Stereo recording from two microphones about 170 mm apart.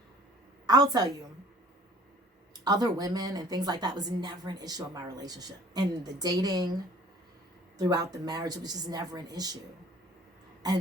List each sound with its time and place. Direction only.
0.7 s speech: 20° right (ahead or behind)
2.6 s speech: 20° right (ahead or behind)
7.8 s speech: 25° right (ahead or behind)